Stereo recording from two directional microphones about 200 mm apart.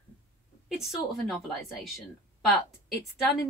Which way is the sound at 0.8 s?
Centre (ahead or behind).